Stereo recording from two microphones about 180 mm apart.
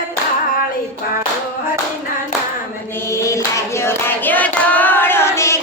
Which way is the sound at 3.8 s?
10° left (ahead or behind).